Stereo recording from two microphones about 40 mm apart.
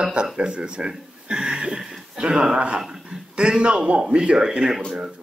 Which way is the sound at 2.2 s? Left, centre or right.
Right.